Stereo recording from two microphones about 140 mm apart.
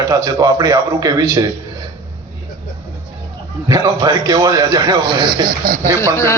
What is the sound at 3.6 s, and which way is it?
A man's voice, 25° right (ahead or behind).